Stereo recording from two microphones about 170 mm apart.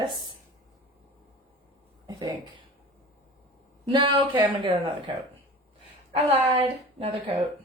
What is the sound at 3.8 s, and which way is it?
A woman's voice, 30° right (ahead or behind).